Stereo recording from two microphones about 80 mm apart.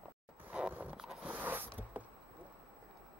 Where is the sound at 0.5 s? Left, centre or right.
Centre.